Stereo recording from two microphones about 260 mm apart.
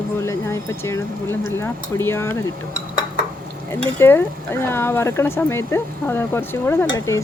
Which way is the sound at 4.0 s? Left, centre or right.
Centre.